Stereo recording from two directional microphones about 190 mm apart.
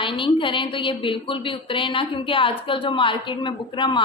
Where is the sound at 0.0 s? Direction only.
25° left (ahead or behind).